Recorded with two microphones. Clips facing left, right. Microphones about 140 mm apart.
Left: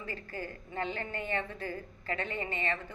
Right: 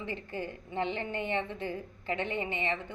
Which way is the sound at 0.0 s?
20° right (ahead or behind).